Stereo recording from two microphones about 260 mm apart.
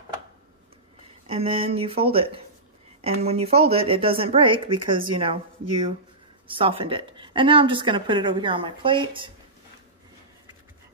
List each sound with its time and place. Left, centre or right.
1.2 s speech: right